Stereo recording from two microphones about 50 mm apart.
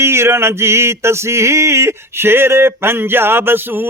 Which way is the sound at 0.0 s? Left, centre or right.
Right.